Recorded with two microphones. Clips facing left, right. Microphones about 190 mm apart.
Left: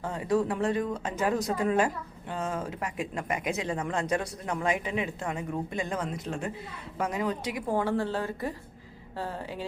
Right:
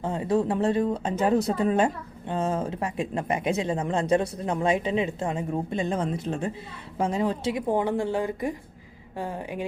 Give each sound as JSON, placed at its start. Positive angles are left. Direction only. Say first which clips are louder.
{"t": 0.0, "sound": "a woman's voice", "louder": "right 3 dB", "side_deg": -25}